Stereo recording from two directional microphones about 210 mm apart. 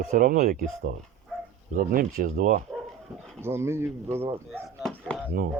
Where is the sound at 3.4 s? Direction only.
10° right (ahead or behind).